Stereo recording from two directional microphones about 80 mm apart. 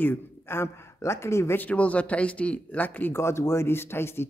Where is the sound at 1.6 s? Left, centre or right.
Centre.